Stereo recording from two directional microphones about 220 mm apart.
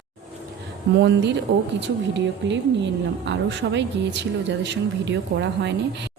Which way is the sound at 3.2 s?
55° right (ahead or behind).